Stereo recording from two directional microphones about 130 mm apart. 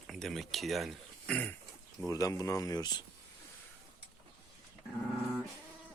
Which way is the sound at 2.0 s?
25° left (ahead or behind).